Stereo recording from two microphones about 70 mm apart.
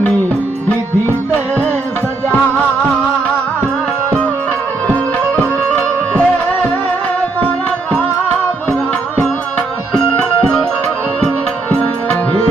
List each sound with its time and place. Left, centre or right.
5.7 s music: left
9.6 s music: centre